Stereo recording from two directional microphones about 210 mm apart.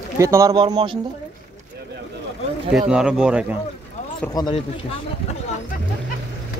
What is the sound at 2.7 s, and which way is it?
Speech, 5° right (ahead or behind).